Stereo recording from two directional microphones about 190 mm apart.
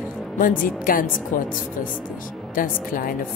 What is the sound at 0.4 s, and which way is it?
Speech, 45° left (ahead or behind).